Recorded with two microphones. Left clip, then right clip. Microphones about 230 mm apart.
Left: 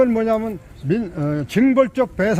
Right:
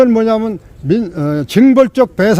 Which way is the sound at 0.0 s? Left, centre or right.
Right.